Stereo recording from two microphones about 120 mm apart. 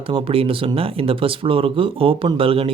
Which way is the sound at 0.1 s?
50° right (ahead or behind).